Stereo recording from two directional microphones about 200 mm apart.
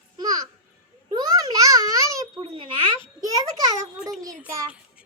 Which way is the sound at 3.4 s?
20° right (ahead or behind).